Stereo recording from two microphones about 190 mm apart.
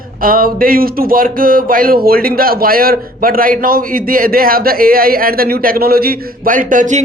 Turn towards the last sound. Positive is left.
turn(degrees=-40)  # may be behind; listen again after turning